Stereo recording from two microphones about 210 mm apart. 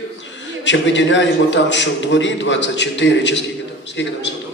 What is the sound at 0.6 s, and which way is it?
A man's voice, 60° left (ahead or behind).